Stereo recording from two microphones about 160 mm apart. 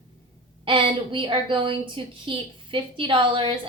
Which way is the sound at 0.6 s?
30° right (ahead or behind).